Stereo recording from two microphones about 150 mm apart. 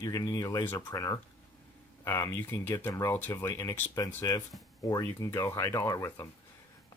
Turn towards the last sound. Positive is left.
turn(degrees=20)  # may be behind; listen again after turning